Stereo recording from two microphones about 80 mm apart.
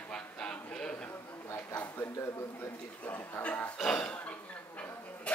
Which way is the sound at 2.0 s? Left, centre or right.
Left.